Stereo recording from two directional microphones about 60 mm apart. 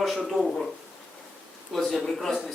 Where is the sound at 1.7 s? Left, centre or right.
Centre.